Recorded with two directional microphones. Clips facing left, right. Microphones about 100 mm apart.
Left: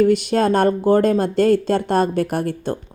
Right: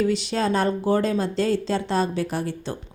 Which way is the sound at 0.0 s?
50° left (ahead or behind).